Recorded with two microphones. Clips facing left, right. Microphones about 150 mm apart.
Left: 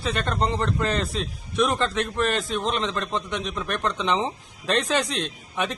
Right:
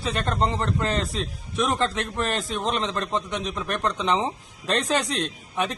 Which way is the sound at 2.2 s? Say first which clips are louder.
Left 2 dB; 35° right (ahead or behind).